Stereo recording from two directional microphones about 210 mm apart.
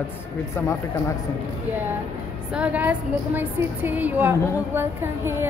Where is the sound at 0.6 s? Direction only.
10° left (ahead or behind).